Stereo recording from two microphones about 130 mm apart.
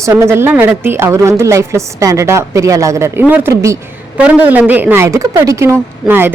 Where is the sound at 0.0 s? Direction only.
20° right (ahead or behind).